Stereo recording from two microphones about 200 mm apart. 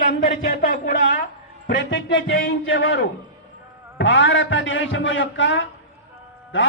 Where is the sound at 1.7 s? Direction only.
65° left (ahead or behind).